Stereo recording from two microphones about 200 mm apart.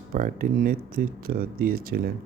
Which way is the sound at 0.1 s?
45° right (ahead or behind).